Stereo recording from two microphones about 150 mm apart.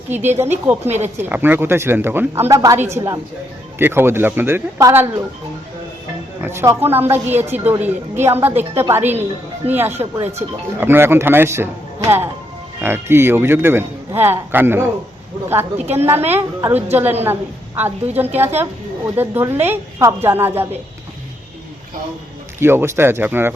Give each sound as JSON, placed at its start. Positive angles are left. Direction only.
{"t": 0.1, "sound": "speech", "side_deg": -15}
{"t": 0.9, "sound": "speech", "side_deg": -50}
{"t": 1.2, "sound": "speech", "side_deg": -15}
{"t": 6.4, "sound": "speech", "side_deg": -15}
{"t": 18.2, "sound": "speech", "side_deg": -15}
{"t": 22.6, "sound": "speech", "side_deg": -15}